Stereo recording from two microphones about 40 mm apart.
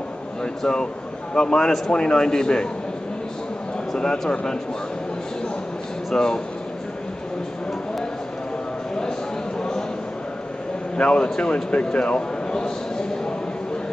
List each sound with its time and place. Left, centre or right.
0.6 s a man's voice: centre
3.9 s a man's voice: centre
6.1 s a man's voice: centre
9.6 s a sound: centre
11.0 s a man's voice: left